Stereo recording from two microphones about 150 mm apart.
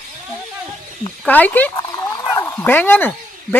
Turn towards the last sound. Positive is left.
turn(degrees=15)  # may be behind; listen again after turning